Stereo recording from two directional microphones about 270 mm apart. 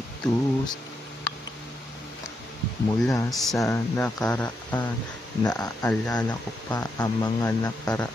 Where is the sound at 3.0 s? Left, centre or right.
Centre.